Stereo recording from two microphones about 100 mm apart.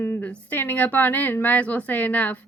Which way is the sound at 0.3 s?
20° left (ahead or behind).